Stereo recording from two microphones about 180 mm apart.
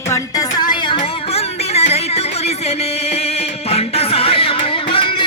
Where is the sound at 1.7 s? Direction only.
35° left (ahead or behind).